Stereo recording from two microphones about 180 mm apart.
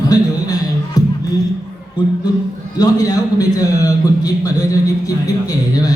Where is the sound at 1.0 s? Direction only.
20° left (ahead or behind).